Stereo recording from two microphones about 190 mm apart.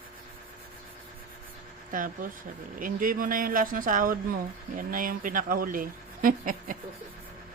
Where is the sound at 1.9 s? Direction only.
45° right (ahead or behind).